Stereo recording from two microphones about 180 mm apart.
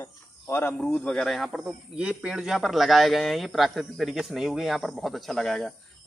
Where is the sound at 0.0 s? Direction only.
15° left (ahead or behind).